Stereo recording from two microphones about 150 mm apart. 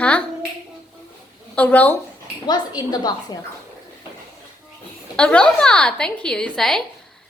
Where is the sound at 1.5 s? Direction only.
10° left (ahead or behind).